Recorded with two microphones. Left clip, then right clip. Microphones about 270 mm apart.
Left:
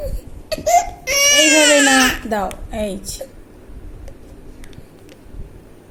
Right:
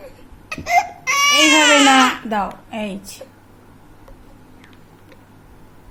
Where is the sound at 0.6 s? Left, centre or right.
Centre.